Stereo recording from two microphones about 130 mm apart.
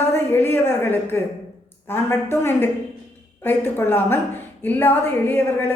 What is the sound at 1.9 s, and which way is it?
A woman's voice, 20° left (ahead or behind).